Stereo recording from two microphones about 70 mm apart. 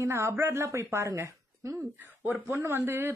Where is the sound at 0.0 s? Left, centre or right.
Right.